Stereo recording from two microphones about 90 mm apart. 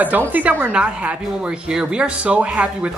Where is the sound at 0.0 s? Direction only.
20° right (ahead or behind).